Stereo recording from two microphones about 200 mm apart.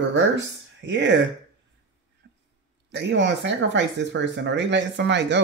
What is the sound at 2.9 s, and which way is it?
Speech, 65° right (ahead or behind).